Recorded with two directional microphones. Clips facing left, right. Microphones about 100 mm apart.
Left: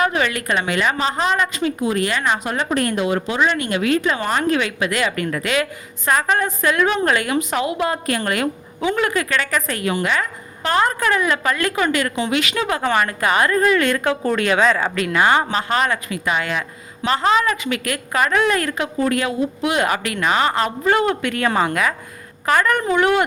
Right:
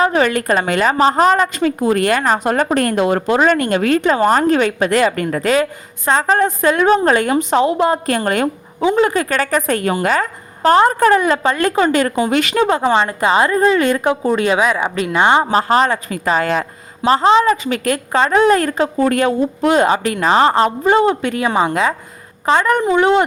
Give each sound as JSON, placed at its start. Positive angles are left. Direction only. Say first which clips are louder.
{"t": 0.0, "sound": "a woman's voice", "louder": "right 5 dB", "side_deg": -35}
{"t": 9.3, "sound": "a woman's voice", "louder": "right 5 dB", "side_deg": -40}
{"t": 15.4, "sound": "a woman's voice", "louder": "right 6 dB", "side_deg": -40}
{"t": 20.8, "sound": "speech", "louder": "right 1 dB", "side_deg": -20}
{"t": 21.7, "sound": "speech", "louder": "right 4 dB", "side_deg": -30}